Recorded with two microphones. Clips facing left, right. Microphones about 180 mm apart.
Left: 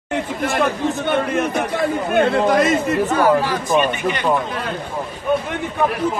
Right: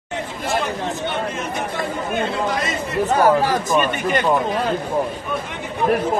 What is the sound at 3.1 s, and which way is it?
Speech, 45° right (ahead or behind).